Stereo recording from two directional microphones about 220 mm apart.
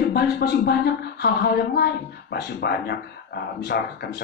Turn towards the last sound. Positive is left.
turn(degrees=45)  # may be behind; listen again after turning